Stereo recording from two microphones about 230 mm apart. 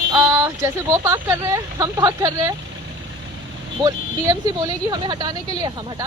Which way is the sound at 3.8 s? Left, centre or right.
Centre.